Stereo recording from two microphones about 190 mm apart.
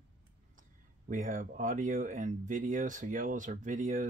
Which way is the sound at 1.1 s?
45° right (ahead or behind).